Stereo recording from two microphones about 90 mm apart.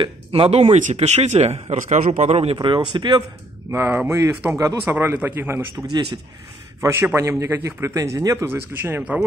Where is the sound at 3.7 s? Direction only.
25° right (ahead or behind).